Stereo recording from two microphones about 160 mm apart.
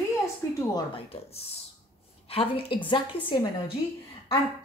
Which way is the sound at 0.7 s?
35° left (ahead or behind).